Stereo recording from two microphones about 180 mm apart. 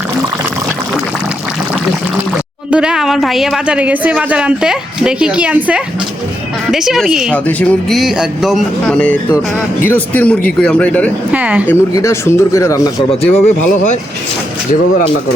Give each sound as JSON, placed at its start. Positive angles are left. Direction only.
{"t": 2.6, "sound": "a woman's voice", "side_deg": -5}
{"t": 7.3, "sound": "a woman's voice", "side_deg": 10}
{"t": 11.3, "sound": "speech", "side_deg": -10}
{"t": 11.7, "sound": "speech", "side_deg": 15}
{"t": 13.1, "sound": "speech", "side_deg": 35}